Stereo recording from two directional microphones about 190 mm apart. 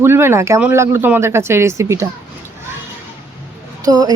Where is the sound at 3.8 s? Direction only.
20° right (ahead or behind).